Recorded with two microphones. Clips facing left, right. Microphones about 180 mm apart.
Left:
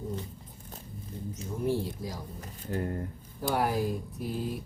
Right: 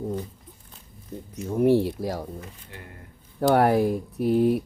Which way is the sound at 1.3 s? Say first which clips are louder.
Right 11 dB; 65° right (ahead or behind).